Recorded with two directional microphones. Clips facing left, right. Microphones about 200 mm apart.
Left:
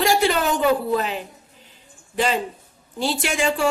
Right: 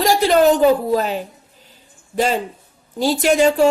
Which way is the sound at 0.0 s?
40° right (ahead or behind).